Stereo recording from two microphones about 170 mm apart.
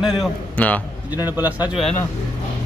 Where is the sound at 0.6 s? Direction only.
10° left (ahead or behind).